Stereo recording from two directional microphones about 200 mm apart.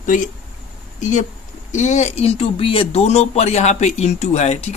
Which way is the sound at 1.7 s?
35° left (ahead or behind).